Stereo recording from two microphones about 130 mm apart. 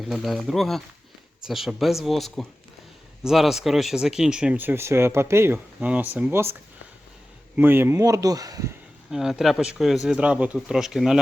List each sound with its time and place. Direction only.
0.0 s speech: centre (ahead or behind); by 8.7 s 25° right (ahead or behind)
9.0 s speech: 5° right (ahead or behind)